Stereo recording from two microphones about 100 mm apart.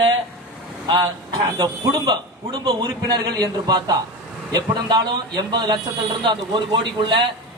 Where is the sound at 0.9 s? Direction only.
45° right (ahead or behind).